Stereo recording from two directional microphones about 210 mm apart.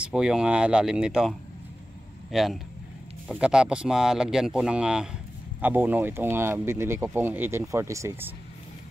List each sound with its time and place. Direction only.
0.0 s speech: 5° right (ahead or behind)
2.3 s speech: centre (ahead or behind)